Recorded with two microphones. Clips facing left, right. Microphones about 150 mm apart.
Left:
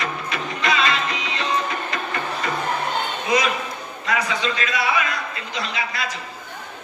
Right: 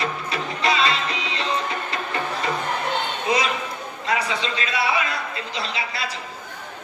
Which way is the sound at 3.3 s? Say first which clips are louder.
Left 2 dB; 30° right (ahead or behind).